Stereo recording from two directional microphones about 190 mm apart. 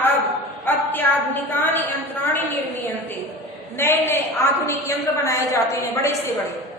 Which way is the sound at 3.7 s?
10° left (ahead or behind).